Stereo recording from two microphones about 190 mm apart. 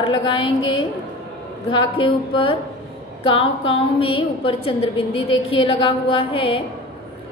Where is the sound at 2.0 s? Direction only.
30° left (ahead or behind).